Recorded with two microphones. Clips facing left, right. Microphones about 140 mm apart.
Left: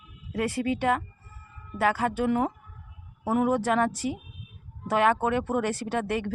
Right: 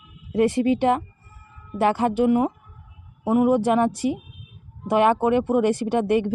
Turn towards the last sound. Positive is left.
turn(degrees=-15)  # may be behind; listen again after turning